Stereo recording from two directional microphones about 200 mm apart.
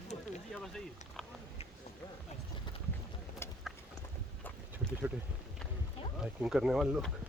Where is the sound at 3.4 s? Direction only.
10° left (ahead or behind).